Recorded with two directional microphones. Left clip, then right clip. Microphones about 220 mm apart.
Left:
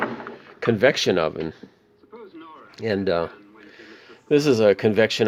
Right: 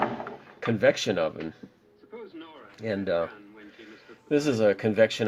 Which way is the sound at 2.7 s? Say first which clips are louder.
Left 5 dB; 40° left (ahead or behind).